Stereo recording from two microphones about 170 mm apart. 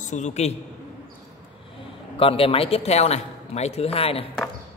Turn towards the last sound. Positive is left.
turn(degrees=35)  # may be behind; listen again after turning